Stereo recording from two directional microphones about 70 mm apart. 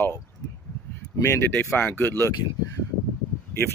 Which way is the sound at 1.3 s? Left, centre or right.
Left.